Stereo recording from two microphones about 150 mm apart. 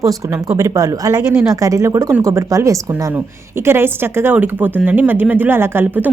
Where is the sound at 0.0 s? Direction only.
25° right (ahead or behind).